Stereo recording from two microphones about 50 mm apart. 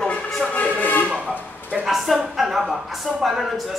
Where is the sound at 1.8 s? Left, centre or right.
Centre.